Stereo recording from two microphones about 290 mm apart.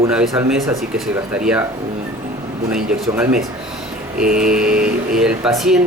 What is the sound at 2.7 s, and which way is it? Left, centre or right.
Speech, centre.